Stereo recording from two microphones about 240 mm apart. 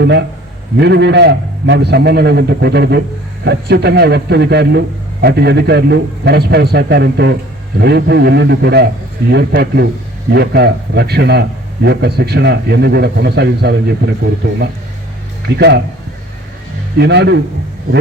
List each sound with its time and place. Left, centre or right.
0.0 s a man's voice: right
15.4 s a man's voice: right
17.0 s a man's voice: right